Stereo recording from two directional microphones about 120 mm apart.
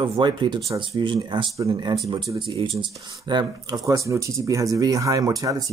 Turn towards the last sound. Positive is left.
turn(degrees=-30)  # may be behind; listen again after turning